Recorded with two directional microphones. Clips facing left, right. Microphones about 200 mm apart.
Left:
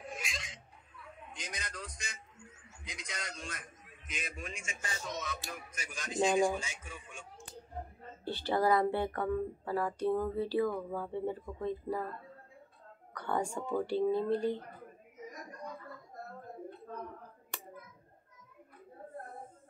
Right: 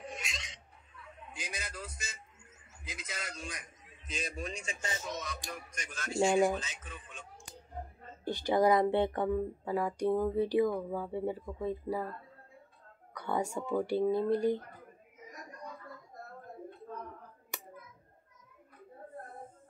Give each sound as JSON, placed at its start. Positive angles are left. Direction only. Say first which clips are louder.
{"t": 0.0, "sound": "a sound", "louder": "even", "side_deg": 0}
{"t": 4.1, "sound": "a man's voice", "louder": "right 4 dB", "side_deg": -35}
{"t": 5.5, "sound": "a man's voice", "louder": "right 1 dB", "side_deg": 5}
{"t": 8.3, "sound": "a woman's voice", "louder": "right 3 dB", "side_deg": -15}
{"t": 13.1, "sound": "a woman's voice", "louder": "right 1 dB", "side_deg": -10}